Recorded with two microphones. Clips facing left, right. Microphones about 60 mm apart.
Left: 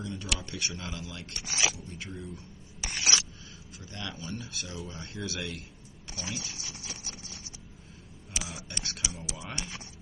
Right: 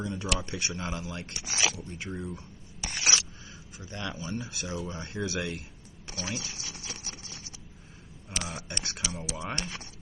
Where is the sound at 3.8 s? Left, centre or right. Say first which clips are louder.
Right 3 dB; centre.